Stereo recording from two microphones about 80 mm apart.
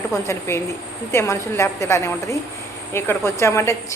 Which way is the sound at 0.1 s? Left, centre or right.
Left.